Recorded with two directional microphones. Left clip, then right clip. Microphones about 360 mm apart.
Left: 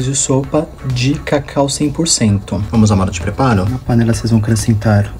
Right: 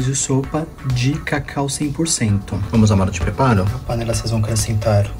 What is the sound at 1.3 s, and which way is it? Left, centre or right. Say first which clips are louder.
Speech: left 10 dB; left.